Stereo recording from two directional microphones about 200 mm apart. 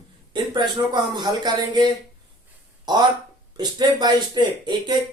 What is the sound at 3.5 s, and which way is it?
Speech, 20° right (ahead or behind).